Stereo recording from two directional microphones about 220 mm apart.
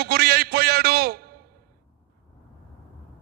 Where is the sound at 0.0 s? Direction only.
45° right (ahead or behind).